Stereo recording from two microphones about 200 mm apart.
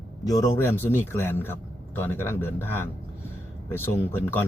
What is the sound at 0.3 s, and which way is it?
Speech, 15° left (ahead or behind).